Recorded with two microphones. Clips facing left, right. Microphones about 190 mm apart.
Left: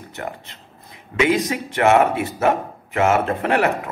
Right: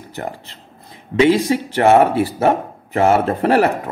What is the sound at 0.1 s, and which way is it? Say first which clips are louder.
Speech: right 4 dB; 35° right (ahead or behind).